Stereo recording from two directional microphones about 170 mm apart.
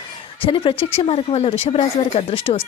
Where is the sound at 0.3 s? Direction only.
30° left (ahead or behind).